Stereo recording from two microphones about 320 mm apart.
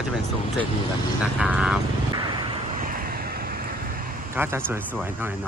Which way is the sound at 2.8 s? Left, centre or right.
Right.